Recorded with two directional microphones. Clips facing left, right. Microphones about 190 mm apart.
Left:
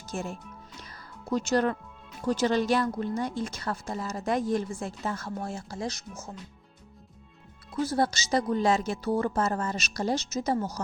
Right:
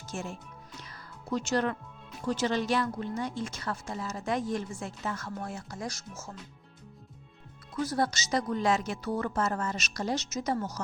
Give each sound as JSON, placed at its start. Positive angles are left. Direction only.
{"t": 0.1, "sound": "speech", "side_deg": 35}
{"t": 0.9, "sound": "music", "side_deg": 40}
{"t": 2.2, "sound": "a woman's voice", "side_deg": 40}
{"t": 7.9, "sound": "a woman's voice", "side_deg": 30}